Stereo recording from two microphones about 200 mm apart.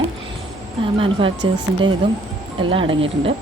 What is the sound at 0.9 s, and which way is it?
Speech, 25° right (ahead or behind).